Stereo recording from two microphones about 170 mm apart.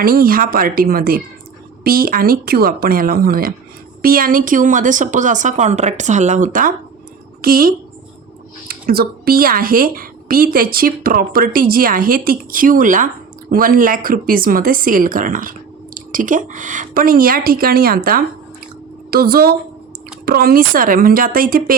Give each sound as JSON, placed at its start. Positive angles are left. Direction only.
{"t": 0.0, "sound": "a woman's voice", "side_deg": -60}